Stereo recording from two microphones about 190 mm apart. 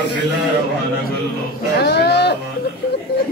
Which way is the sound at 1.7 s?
60° left (ahead or behind).